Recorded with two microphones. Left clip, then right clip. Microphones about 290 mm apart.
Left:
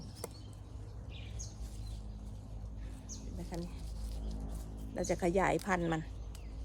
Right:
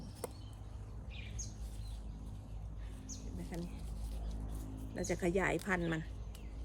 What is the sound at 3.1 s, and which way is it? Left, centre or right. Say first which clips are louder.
Mouse: left 1 dB; right.